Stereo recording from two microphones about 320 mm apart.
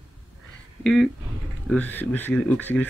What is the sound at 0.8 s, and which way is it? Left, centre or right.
Speech, centre.